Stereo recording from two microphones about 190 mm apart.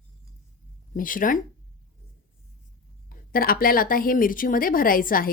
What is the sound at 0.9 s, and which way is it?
Speech, 45° left (ahead or behind).